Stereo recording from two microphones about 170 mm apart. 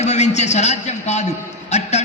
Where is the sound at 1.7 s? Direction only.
40° left (ahead or behind).